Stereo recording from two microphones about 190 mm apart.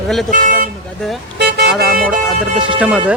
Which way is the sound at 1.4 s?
60° right (ahead or behind).